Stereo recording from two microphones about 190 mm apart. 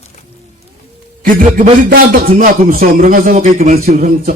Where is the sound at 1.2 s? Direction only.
50° right (ahead or behind).